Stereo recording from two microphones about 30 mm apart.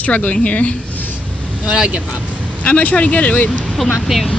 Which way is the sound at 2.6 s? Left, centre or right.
Left.